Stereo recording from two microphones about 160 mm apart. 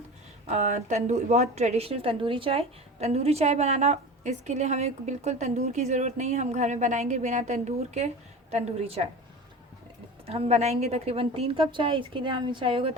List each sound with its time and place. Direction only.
0.4 s a woman's voice: 45° right (ahead or behind)
10.2 s a woman's voice: 40° right (ahead or behind)